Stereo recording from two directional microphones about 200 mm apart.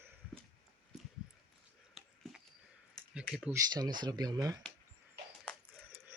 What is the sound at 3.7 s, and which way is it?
Speech, 20° right (ahead or behind).